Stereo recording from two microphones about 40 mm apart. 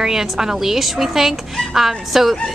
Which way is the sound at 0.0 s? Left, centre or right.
Centre.